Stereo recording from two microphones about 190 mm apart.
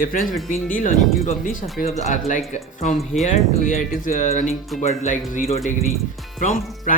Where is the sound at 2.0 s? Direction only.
40° left (ahead or behind).